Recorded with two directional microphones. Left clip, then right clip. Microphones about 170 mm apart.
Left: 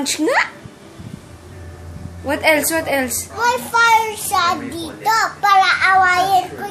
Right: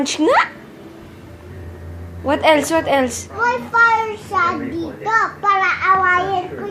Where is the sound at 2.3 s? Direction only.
5° right (ahead or behind).